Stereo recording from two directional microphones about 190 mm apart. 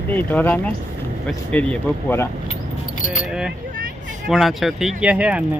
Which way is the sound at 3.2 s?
5° right (ahead or behind).